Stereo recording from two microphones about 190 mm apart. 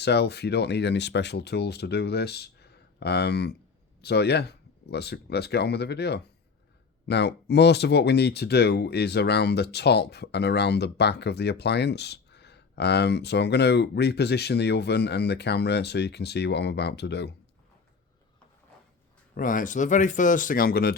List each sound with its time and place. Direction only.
0.0 s speech: 60° left (ahead or behind)
19.3 s speech: 45° left (ahead or behind)